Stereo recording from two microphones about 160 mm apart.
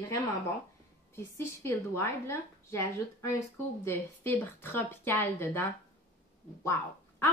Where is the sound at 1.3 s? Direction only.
15° left (ahead or behind).